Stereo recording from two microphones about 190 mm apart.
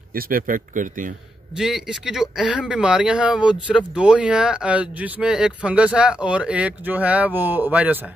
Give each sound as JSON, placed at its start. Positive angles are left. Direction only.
{"t": 0.1, "sound": "a man's voice", "side_deg": -50}
{"t": 1.6, "sound": "speech", "side_deg": -5}